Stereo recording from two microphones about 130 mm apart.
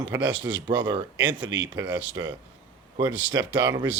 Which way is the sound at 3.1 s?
15° right (ahead or behind).